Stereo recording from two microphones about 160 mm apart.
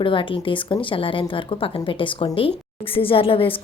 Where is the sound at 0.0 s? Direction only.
30° left (ahead or behind).